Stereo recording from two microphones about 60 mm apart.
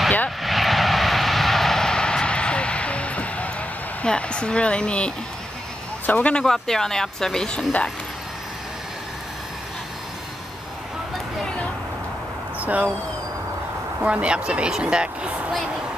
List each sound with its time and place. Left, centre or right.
0.4 s vehicle: centre; by 3.5 s left
4.0 s speech: centre
6.0 s speech: left
6.4 s speech: centre
11.4 s vehicle: centre
12.5 s speech: right
14.0 s speech: centre